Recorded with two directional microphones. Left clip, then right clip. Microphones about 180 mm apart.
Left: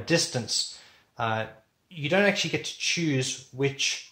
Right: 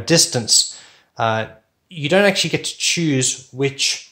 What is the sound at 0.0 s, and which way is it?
Speech, 40° right (ahead or behind).